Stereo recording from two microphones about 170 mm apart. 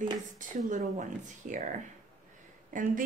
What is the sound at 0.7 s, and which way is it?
Speech, 45° right (ahead or behind).